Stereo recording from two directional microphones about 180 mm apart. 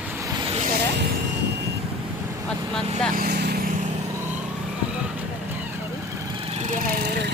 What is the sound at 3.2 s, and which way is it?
Vehicle, 60° right (ahead or behind).